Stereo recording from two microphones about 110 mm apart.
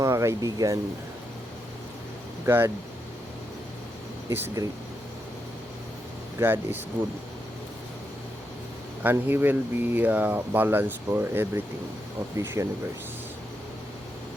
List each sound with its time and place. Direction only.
0.0 s speech: 30° right (ahead or behind)
2.5 s speech: 20° right (ahead or behind)
4.3 s speech: 20° right (ahead or behind)
6.4 s speech: 20° right (ahead or behind)
9.0 s speech: 20° right (ahead or behind)